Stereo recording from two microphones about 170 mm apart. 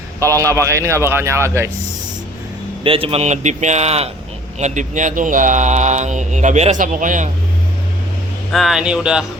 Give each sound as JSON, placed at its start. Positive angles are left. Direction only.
{"t": 0.2, "sound": "a man's voice", "side_deg": -20}
{"t": 2.8, "sound": "speech", "side_deg": -35}
{"t": 8.5, "sound": "speech", "side_deg": 0}